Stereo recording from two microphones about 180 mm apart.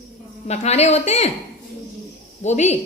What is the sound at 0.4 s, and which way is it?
Speech, 40° left (ahead or behind).